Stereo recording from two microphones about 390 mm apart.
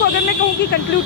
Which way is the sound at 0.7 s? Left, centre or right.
Left.